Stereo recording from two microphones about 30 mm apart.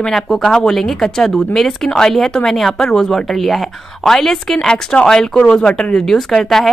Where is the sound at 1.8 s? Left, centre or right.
Left.